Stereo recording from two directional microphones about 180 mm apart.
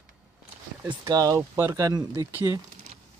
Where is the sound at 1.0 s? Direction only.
20° right (ahead or behind).